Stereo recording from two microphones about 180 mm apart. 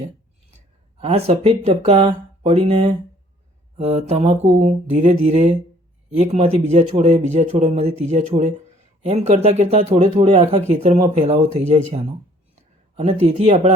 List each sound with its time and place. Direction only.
1.0 s speech: 35° right (ahead or behind)